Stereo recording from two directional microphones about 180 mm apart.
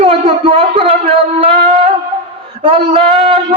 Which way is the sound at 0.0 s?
30° right (ahead or behind).